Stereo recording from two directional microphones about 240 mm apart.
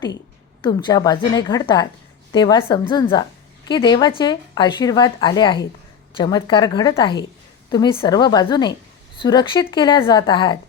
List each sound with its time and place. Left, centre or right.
0.6 s a woman's voice: centre